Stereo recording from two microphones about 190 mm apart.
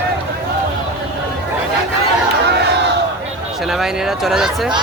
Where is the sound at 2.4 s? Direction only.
65° right (ahead or behind).